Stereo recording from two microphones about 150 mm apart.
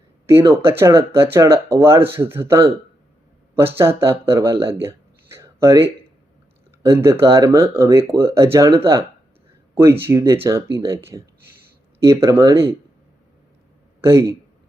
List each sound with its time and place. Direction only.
0.3 s speech: 15° right (ahead or behind)
9.7 s speech: 15° right (ahead or behind)
14.0 s speech: 20° right (ahead or behind)